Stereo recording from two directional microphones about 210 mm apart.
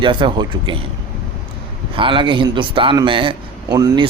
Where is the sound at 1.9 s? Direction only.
25° right (ahead or behind).